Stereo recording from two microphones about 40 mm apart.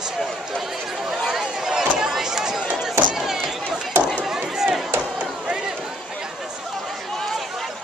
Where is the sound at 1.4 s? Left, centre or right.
Centre.